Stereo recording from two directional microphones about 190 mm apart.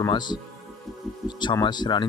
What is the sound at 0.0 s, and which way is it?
Speech, 25° left (ahead or behind).